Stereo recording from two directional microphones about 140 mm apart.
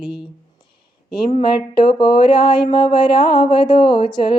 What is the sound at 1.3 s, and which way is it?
Speech, 40° left (ahead or behind).